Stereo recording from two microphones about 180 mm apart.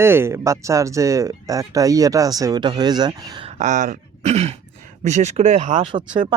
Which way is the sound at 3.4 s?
40° right (ahead or behind).